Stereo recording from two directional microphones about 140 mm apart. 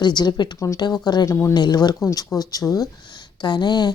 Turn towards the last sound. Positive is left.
turn(degrees=30)  # may be behind; listen again after turning